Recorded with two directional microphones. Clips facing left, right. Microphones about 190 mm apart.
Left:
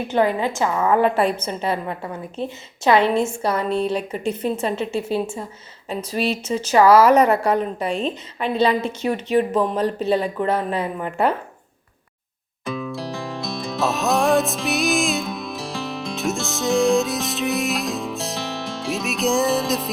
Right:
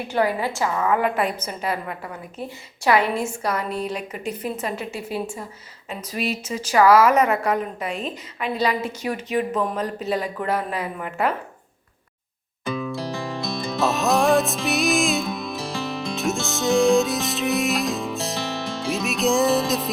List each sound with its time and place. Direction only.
0.1 s a woman's voice: 20° left (ahead or behind)
0.9 s a woman's voice: 30° left (ahead or behind)
12.6 s music: centre (ahead or behind)